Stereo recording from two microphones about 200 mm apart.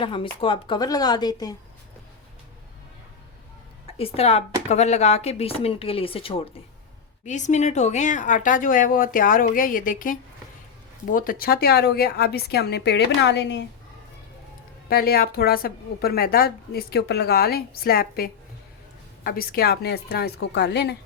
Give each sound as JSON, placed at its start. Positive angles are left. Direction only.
{"t": 0.0, "sound": "speech", "side_deg": 25}
{"t": 3.9, "sound": "a woman's voice", "side_deg": 30}
{"t": 14.8, "sound": "a woman's voice", "side_deg": 50}